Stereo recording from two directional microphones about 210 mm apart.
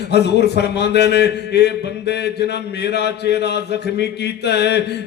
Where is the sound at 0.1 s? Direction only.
50° left (ahead or behind).